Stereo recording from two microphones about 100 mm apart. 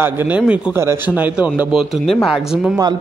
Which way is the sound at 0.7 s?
25° right (ahead or behind).